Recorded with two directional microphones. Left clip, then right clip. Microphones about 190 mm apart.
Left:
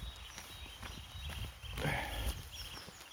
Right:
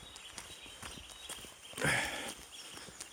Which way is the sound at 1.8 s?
25° right (ahead or behind).